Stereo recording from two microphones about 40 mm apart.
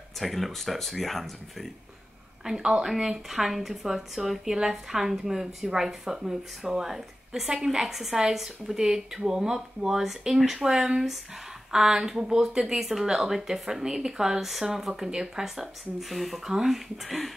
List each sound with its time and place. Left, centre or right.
0.2 s speech: centre
2.4 s a woman's voice: centre